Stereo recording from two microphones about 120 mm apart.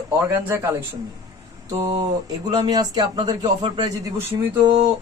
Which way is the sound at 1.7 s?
30° right (ahead or behind).